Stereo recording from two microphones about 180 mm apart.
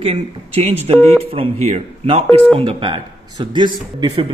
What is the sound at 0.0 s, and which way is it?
A man's voice, 35° right (ahead or behind).